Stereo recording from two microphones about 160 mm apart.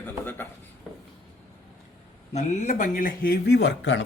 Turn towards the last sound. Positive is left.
turn(degrees=90)